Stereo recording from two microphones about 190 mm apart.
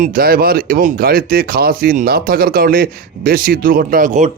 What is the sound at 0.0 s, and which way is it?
Speech, 50° right (ahead or behind).